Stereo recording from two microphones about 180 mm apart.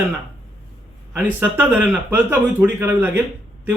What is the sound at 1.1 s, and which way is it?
Speech, 10° right (ahead or behind).